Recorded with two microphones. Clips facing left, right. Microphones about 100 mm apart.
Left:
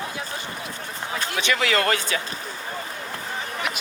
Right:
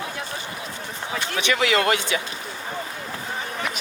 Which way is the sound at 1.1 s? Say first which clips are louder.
Right 1 dB; 40° left (ahead or behind).